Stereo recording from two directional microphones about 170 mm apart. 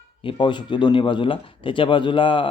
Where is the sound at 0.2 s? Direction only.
30° left (ahead or behind).